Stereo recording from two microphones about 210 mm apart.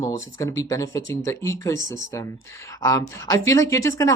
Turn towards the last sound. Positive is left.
turn(degrees=15)  # may be behind; listen again after turning